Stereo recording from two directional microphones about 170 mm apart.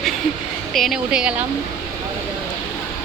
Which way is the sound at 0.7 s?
Centre (ahead or behind).